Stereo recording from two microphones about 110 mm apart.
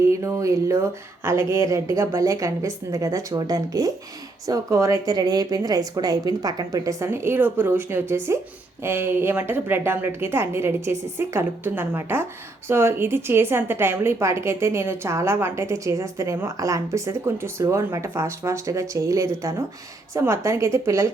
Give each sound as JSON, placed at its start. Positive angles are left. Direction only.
{"t": 0.0, "sound": "a woman's voice", "side_deg": -30}